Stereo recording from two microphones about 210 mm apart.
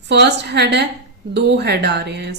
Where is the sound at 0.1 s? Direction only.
55° right (ahead or behind).